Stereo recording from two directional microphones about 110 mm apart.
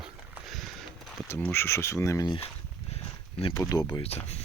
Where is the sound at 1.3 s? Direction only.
20° left (ahead or behind).